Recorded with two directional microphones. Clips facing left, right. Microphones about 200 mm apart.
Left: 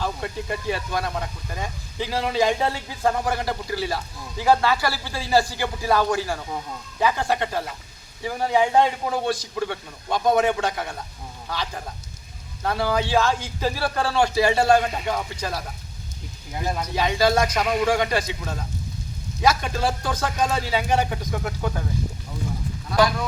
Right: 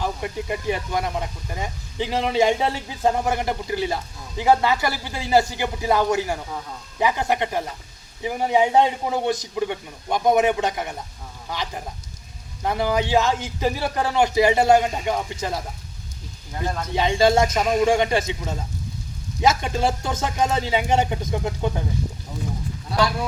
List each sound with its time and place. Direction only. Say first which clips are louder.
0.0 s speech: right 1 dB; 15° right (ahead or behind)
16.6 s speech: even; 10° left (ahead or behind)
16.9 s speech: right 3 dB; 25° right (ahead or behind)